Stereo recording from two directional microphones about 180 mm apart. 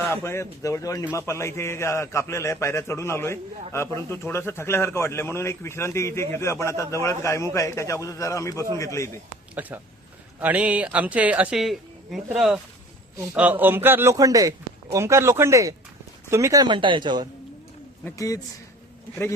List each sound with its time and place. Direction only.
0.1 s a man's voice: 15° left (ahead or behind)
9.6 s speech: 10° right (ahead or behind); by 17.2 s 25° right (ahead or behind)
18.0 s speech: 20° left (ahead or behind)